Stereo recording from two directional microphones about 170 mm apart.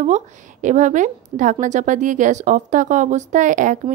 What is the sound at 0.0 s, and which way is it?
A woman's voice, 45° right (ahead or behind).